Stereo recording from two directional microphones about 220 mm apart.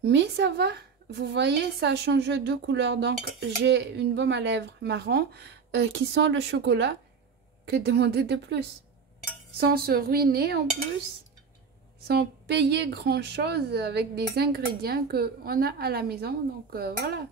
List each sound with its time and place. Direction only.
0.0 s a woman's voice: 50° right (ahead or behind)
9.6 s a woman's voice: 45° right (ahead or behind)
12.1 s a woman's voice: 50° right (ahead or behind)